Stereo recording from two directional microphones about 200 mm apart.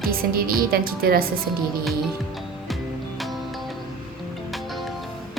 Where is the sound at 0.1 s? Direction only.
45° right (ahead or behind).